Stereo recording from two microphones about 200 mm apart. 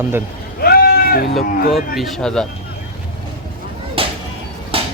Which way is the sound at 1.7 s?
Centre (ahead or behind).